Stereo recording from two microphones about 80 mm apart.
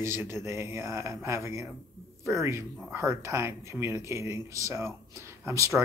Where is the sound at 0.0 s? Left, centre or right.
Right.